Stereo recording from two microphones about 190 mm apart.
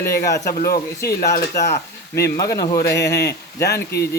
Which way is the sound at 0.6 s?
55° left (ahead or behind).